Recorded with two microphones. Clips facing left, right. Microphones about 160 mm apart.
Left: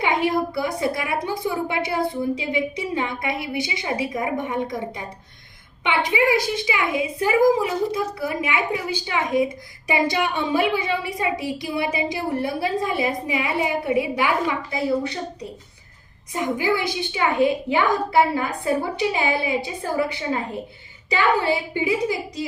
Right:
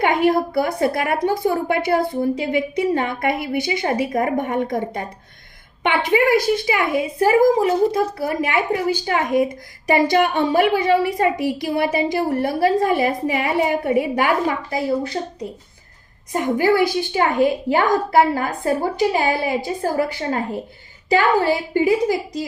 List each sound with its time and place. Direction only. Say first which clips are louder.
0.0 s a woman's voice: right 4 dB; 55° right (ahead or behind)
16.3 s a woman's voice: right 5 dB; 45° right (ahead or behind)